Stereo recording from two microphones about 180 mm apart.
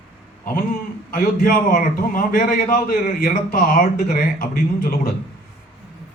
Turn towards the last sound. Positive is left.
turn(degrees=55)  # may be behind; listen again after turning